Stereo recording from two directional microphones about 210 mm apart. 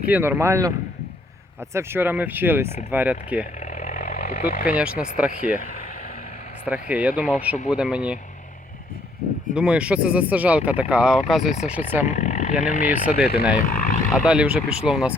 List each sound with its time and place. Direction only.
0.1 s speech: 10° right (ahead or behind)
1.7 s speech: 10° right (ahead or behind)
3.8 s vehicle: 40° left (ahead or behind)
4.8 s speech: 5° right (ahead or behind)
6.7 s speech: 5° right (ahead or behind)
9.6 s speech: 5° right (ahead or behind)
12.0 s speech: 35° left (ahead or behind)
13.1 s speech: 50° left (ahead or behind)
13.7 s vehicle: 40° left (ahead or behind)
14.1 s speech: 5° right (ahead or behind)